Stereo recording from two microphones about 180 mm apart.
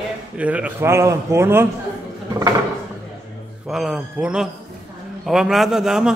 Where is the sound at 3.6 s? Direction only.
Centre (ahead or behind).